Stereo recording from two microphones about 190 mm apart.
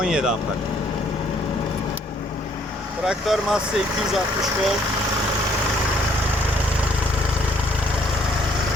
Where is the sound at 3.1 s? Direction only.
Centre (ahead or behind).